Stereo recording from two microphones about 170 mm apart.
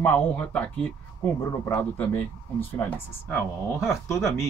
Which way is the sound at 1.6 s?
15° left (ahead or behind).